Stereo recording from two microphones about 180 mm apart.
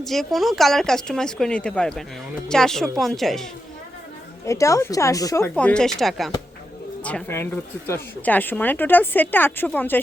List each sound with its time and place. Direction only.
0.0 s speech: centre (ahead or behind)
4.4 s speech: 15° left (ahead or behind)
5.5 s speech: 5° left (ahead or behind)